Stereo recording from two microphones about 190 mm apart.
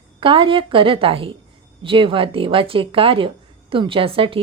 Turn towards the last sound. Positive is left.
turn(degrees=-30)  # may be behind; listen again after turning